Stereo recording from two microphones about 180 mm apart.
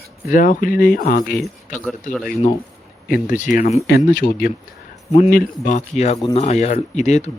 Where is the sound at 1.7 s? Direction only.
10° left (ahead or behind).